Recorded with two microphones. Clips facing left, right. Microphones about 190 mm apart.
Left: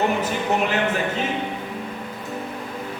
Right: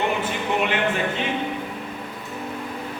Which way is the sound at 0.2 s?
40° left (ahead or behind).